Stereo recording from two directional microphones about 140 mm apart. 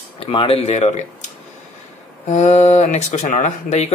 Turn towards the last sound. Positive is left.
turn(degrees=50)  # may be behind; listen again after turning